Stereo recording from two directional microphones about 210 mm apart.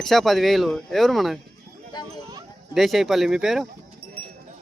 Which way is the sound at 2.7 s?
Centre (ahead or behind).